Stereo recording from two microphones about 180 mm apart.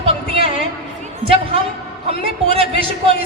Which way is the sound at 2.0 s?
30° right (ahead or behind).